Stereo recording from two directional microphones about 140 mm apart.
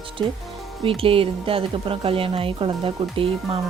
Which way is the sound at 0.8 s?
40° right (ahead or behind).